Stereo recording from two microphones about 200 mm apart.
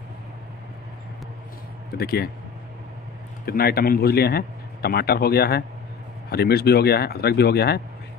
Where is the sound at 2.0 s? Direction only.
50° left (ahead or behind).